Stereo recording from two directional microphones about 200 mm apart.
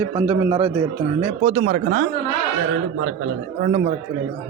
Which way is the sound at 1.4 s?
40° right (ahead or behind).